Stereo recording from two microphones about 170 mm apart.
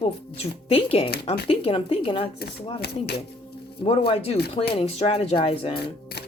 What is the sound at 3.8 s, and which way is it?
Speech, 35° left (ahead or behind).